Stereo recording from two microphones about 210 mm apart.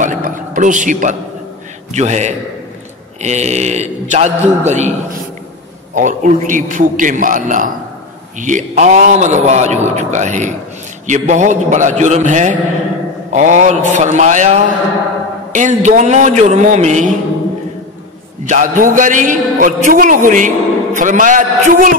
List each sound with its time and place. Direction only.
0.0 s a sound: 40° right (ahead or behind)
1.9 s a man's voice: 35° right (ahead or behind)
5.9 s a man's voice: 35° right (ahead or behind)
18.4 s a man's voice: 35° right (ahead or behind)